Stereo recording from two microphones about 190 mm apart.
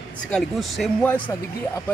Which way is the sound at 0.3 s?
Centre (ahead or behind).